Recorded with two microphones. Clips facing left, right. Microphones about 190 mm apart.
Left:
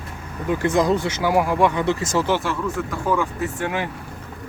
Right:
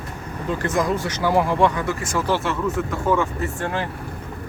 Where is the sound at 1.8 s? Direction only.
20° left (ahead or behind).